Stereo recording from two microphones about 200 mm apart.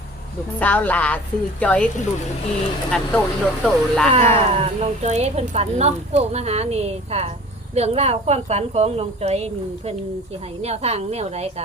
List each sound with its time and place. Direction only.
0.6 s a woman's voice: 10° left (ahead or behind)
2.9 s speech: 5° left (ahead or behind)
4.4 s speech: 30° right (ahead or behind)